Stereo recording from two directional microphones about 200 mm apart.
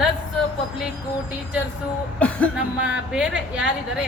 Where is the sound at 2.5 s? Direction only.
5° right (ahead or behind).